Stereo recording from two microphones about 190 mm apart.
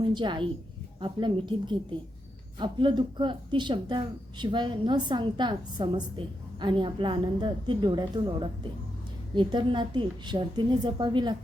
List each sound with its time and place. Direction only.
0.0 s a woman's voice: 25° right (ahead or behind)